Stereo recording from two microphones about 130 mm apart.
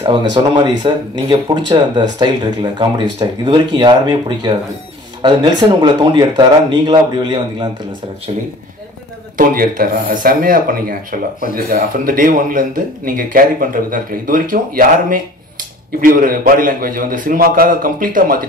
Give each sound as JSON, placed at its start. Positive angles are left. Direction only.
{"t": 0.2, "sound": "speech", "side_deg": -35}
{"t": 9.4, "sound": "speech", "side_deg": -90}